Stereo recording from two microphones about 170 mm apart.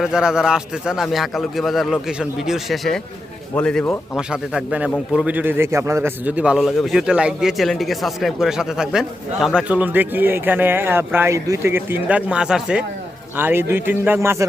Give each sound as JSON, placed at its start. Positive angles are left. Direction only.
{"t": 0.0, "sound": "a man's voice", "side_deg": -5}
{"t": 4.2, "sound": "a man's voice", "side_deg": -5}